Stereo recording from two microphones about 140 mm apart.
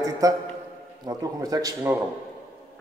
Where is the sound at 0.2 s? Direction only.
25° right (ahead or behind).